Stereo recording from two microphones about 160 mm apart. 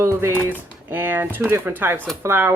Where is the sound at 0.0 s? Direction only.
15° right (ahead or behind).